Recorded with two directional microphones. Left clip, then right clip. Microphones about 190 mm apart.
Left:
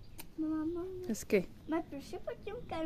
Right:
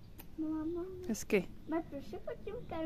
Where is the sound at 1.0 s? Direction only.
Centre (ahead or behind).